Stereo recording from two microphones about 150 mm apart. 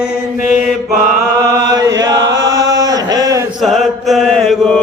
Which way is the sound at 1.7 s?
20° right (ahead or behind).